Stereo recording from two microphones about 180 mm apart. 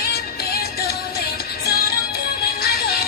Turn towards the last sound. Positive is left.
turn(degrees=60)  # may be behind; listen again after turning